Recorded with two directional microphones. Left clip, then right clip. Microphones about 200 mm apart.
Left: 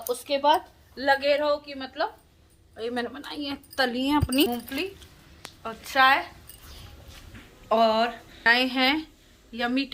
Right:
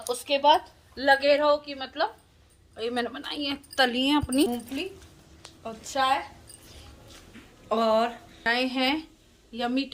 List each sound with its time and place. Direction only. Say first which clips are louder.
0.1 s a woman's voice: right 1 dB; 5° right (ahead or behind)
0.9 s a woman's voice: right 2 dB; 20° right (ahead or behind)
2.7 s a woman's voice: right 1 dB; 10° right (ahead or behind); by 6.1 s 5° left (ahead or behind)
7.7 s a woman's voice: left 2 dB; 10° right (ahead or behind)